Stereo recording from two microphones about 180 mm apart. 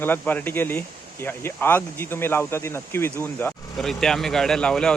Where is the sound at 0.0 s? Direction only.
10° left (ahead or behind).